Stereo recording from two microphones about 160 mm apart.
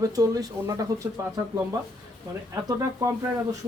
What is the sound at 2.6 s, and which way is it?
Speech, 20° right (ahead or behind).